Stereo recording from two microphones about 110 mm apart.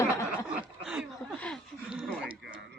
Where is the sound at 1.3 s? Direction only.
10° left (ahead or behind).